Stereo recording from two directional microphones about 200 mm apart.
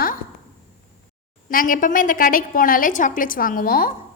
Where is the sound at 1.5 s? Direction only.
45° left (ahead or behind).